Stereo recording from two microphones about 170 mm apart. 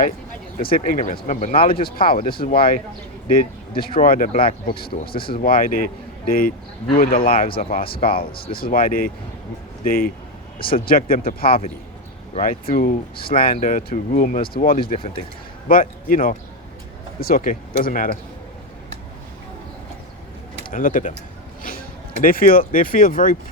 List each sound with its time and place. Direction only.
0.6 s speech: 55° left (ahead or behind)
20.7 s speech: 50° left (ahead or behind)